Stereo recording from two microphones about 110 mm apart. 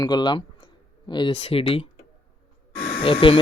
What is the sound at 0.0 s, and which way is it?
Speech, 40° left (ahead or behind).